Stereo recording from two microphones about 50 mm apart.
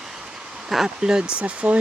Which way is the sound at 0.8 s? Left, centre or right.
Centre.